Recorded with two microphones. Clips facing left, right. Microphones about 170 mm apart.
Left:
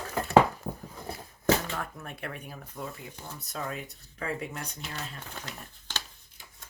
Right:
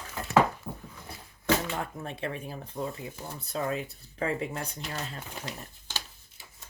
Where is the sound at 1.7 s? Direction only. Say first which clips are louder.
Right 3 dB; 25° right (ahead or behind).